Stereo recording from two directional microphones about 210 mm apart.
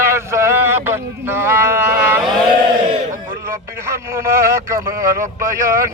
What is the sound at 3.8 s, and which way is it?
Speech, 15° right (ahead or behind).